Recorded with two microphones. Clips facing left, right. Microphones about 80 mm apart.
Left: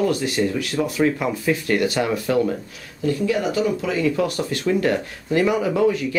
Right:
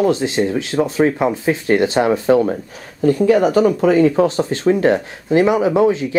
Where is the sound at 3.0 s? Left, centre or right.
Right.